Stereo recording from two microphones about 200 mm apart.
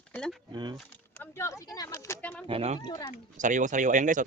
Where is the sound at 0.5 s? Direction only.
20° right (ahead or behind).